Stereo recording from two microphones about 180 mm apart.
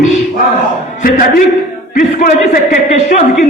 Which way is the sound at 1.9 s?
45° left (ahead or behind).